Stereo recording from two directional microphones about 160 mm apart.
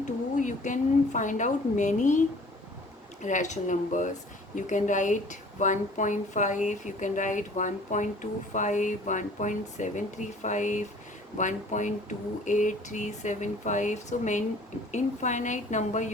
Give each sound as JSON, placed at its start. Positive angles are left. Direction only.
{"t": 0.0, "sound": "speech", "side_deg": 50}